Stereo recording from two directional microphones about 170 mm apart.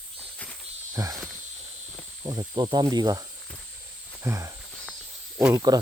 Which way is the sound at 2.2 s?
25° right (ahead or behind).